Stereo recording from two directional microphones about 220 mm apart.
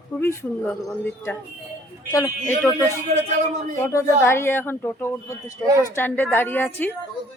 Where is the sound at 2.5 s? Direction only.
5° left (ahead or behind).